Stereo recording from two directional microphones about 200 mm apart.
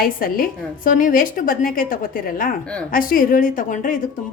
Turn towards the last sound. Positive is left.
turn(degrees=40)  # may be behind; listen again after turning